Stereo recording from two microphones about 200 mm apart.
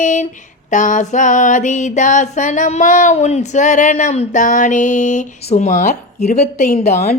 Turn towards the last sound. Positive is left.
turn(degrees=35)  # may be behind; listen again after turning